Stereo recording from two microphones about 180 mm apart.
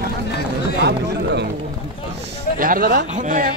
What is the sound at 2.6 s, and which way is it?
Speech, 50° right (ahead or behind).